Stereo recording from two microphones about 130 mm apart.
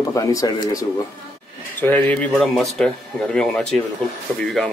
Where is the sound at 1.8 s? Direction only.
10° left (ahead or behind).